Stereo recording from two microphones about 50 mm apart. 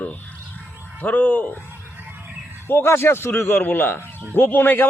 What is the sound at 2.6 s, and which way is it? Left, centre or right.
A man's voice, left.